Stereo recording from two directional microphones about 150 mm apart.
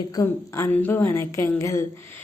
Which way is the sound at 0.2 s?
20° left (ahead or behind).